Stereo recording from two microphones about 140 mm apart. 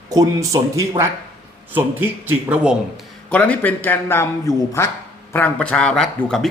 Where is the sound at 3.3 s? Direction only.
10° left (ahead or behind).